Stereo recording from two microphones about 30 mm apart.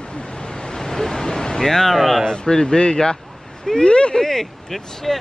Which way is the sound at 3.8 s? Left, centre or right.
Left.